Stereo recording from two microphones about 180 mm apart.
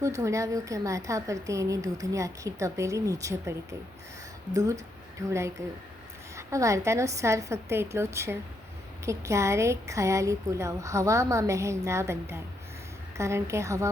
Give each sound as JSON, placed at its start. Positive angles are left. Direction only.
{"t": 0.0, "sound": "a woman's voice", "side_deg": -15}